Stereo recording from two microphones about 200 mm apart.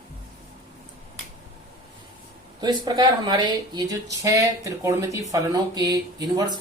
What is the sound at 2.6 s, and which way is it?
Speech, 20° right (ahead or behind).